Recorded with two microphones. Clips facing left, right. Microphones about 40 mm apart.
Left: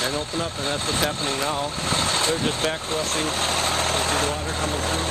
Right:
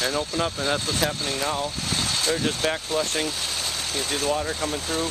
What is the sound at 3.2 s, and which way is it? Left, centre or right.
Vehicle, left.